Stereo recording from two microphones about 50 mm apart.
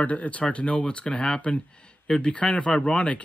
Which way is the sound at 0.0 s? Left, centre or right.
Left.